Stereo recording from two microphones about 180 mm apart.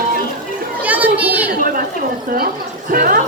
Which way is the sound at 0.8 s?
10° right (ahead or behind).